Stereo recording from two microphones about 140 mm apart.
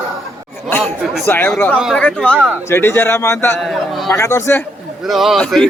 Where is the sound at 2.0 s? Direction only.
10° left (ahead or behind).